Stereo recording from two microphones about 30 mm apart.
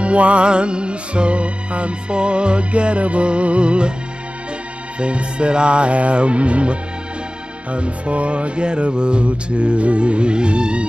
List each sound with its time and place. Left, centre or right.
0.0 s music: right
4.9 s music: right